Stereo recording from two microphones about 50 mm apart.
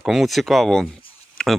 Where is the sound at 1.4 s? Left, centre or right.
Centre.